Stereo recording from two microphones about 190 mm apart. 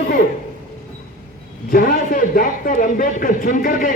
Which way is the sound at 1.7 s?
50° left (ahead or behind).